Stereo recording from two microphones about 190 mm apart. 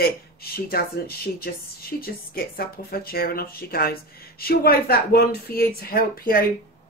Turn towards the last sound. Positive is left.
turn(degrees=50)  # may be behind; listen again after turning